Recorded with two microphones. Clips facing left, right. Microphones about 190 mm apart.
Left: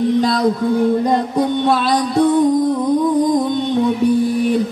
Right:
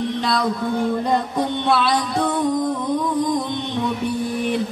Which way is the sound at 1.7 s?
40° left (ahead or behind).